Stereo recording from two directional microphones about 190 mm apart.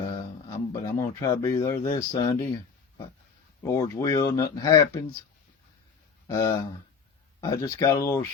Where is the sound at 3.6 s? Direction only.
15° left (ahead or behind).